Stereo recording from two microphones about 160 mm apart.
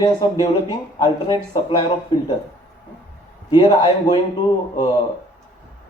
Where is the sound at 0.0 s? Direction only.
25° left (ahead or behind).